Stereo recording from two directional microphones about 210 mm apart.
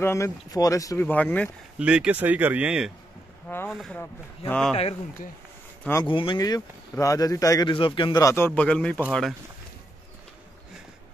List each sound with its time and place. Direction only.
0.0 s speech: 10° left (ahead or behind)
1.8 s speech: 5° right (ahead or behind)
3.4 s speech: 10° left (ahead or behind)
4.7 s speech: 30° left (ahead or behind); by 9.0 s 5° left (ahead or behind)